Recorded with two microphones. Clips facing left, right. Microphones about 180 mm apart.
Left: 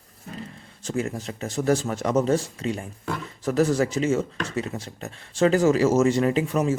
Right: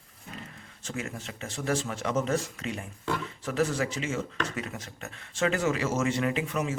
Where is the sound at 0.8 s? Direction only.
35° left (ahead or behind).